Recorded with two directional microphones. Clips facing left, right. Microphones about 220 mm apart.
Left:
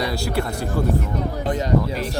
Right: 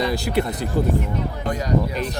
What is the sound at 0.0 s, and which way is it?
Speech, 20° right (ahead or behind).